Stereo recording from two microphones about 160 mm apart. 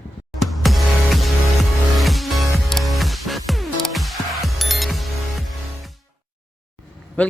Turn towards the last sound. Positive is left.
turn(degrees=10)  # may be behind; listen again after turning